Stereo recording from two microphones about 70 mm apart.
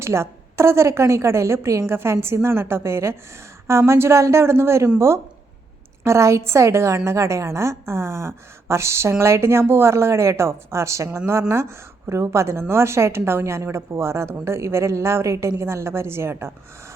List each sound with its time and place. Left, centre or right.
0.0 s a woman's voice: right